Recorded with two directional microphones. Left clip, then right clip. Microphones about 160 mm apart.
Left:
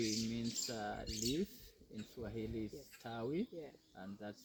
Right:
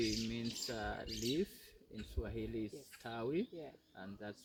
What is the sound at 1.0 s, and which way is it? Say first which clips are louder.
Speech: even; 55° left (ahead or behind).